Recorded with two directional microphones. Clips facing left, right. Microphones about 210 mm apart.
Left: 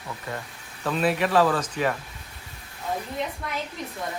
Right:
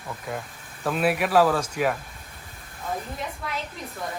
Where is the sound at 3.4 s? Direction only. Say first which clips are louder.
Even; centre (ahead or behind).